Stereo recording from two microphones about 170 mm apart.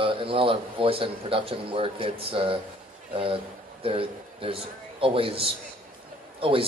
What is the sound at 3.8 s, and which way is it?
A man's voice, 35° right (ahead or behind).